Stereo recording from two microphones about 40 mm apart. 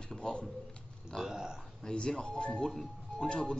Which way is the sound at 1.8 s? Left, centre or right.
Centre.